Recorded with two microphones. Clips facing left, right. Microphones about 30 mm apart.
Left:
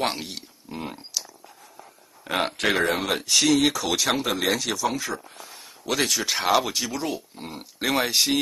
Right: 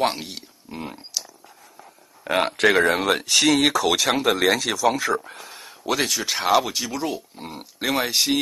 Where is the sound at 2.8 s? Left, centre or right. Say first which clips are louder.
Right 4 dB; right.